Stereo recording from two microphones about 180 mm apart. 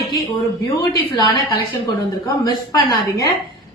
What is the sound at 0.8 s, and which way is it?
Speech, 20° left (ahead or behind).